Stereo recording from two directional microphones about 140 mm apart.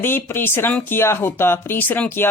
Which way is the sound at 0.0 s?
15° left (ahead or behind).